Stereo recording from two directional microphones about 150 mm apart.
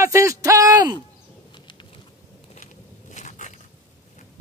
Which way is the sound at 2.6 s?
55° left (ahead or behind).